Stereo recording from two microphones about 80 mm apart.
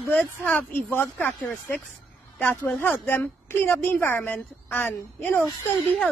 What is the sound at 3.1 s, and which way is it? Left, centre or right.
A woman's voice, left.